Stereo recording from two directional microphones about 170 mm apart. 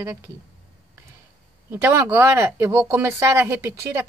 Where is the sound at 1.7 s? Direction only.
15° right (ahead or behind).